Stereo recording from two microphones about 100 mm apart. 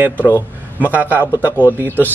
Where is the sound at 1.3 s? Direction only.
20° left (ahead or behind).